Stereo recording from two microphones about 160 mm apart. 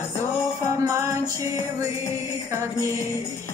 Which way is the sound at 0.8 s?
15° right (ahead or behind).